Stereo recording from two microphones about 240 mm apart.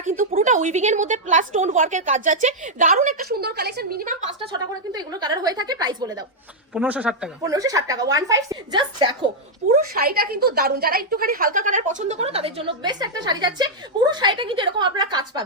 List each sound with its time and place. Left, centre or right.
0.0 s a woman's voice: right
4.4 s a woman's voice: centre
6.7 s a woman's voice: centre
9.9 s a woman's voice: right; by 15.4 s centre